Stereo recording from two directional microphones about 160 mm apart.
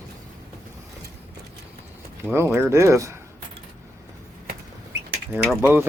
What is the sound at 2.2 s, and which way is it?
Speech, 15° right (ahead or behind).